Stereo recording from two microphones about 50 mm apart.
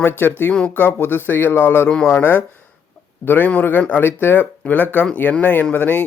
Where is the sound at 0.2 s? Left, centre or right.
Left.